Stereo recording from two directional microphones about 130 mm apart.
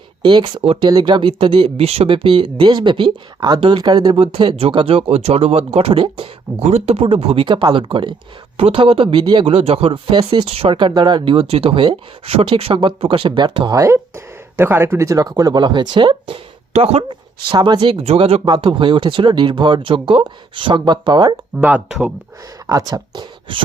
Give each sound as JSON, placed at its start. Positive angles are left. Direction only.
{"t": 0.2, "sound": "speech", "side_deg": -35}
{"t": 0.9, "sound": "speech", "side_deg": -35}
{"t": 10.8, "sound": "speech", "side_deg": -35}
{"t": 13.7, "sound": "speech", "side_deg": -20}
{"t": 21.6, "sound": "speech", "side_deg": -10}
{"t": 22.6, "sound": "speech", "side_deg": -30}